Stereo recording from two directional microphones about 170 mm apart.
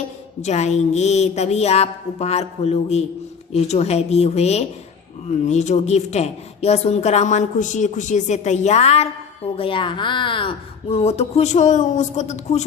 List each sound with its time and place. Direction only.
0.4 s a woman's voice: 40° left (ahead or behind)